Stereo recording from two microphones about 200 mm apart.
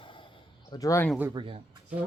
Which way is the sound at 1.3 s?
25° right (ahead or behind).